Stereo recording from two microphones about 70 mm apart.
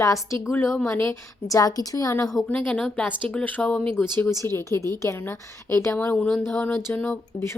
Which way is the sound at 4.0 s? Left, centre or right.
Left.